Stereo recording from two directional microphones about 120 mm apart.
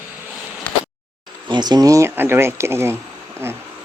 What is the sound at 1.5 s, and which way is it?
Speech, 35° right (ahead or behind).